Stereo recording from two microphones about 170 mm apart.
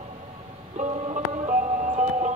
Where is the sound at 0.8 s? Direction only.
40° right (ahead or behind).